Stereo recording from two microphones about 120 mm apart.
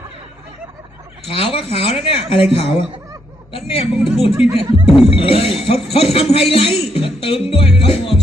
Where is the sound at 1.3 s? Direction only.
50° left (ahead or behind).